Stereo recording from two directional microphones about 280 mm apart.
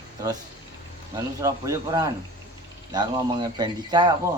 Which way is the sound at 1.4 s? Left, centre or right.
Centre.